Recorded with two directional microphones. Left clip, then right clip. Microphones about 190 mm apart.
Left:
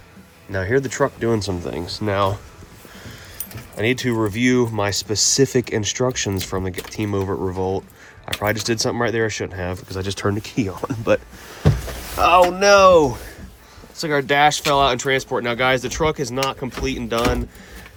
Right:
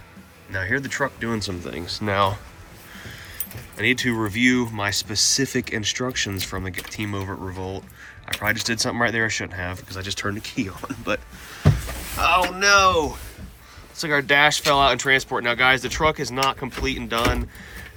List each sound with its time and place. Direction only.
0.5 s speech: 35° left (ahead or behind)
1.8 s speech: centre (ahead or behind)
2.0 s speech: 20° left (ahead or behind)
3.8 s speech: 30° left (ahead or behind)
12.1 s speech: 50° left (ahead or behind)
13.9 s speech: 25° left (ahead or behind)